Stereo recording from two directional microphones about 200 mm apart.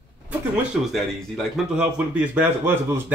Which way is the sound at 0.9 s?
Centre (ahead or behind).